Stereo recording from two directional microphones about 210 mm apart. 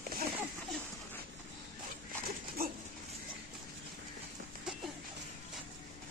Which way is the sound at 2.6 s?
45° right (ahead or behind).